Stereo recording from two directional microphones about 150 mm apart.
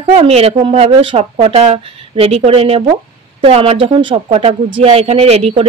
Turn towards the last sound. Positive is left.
turn(degrees=-45)  # may be behind; listen again after turning